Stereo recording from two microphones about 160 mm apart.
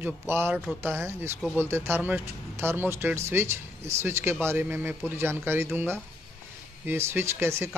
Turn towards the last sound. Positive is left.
turn(degrees=-15)  # may be behind; listen again after turning